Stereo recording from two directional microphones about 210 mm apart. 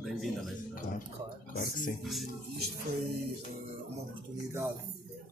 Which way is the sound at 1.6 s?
40° left (ahead or behind).